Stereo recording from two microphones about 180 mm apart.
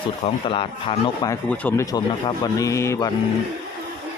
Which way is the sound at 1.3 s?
10° left (ahead or behind).